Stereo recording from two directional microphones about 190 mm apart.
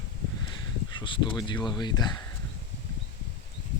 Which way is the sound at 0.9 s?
25° left (ahead or behind).